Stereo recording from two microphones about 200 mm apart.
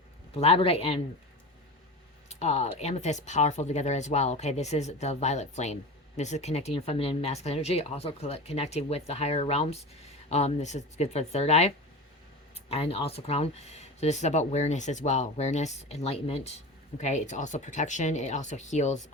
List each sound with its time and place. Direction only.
0.3 s speech: 30° left (ahead or behind)
2.3 s speech: 35° left (ahead or behind)